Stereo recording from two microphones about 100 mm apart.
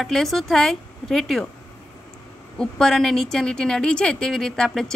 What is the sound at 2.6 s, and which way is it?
A woman's voice, 5° left (ahead or behind).